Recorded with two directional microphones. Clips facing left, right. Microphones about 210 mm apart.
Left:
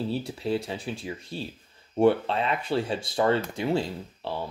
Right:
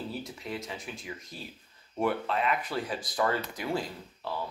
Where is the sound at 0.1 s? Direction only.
30° left (ahead or behind).